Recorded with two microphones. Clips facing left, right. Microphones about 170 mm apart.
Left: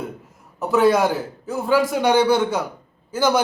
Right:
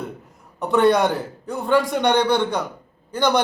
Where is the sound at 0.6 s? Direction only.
Centre (ahead or behind).